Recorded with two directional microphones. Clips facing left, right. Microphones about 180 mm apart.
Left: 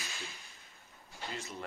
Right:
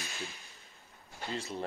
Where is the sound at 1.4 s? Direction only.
30° right (ahead or behind).